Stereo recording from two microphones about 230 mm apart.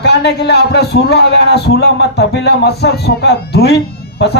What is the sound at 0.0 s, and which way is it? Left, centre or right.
A man's voice, left.